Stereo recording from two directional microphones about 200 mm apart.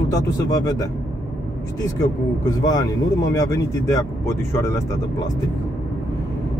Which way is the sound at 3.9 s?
15° left (ahead or behind).